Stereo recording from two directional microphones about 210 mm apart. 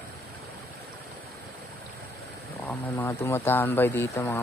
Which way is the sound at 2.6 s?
10° left (ahead or behind).